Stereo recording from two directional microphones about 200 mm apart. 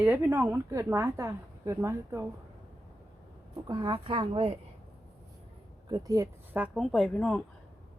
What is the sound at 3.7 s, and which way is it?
Speech, 20° right (ahead or behind).